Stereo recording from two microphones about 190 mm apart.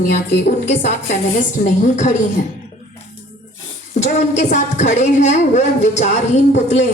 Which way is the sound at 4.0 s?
40° left (ahead or behind).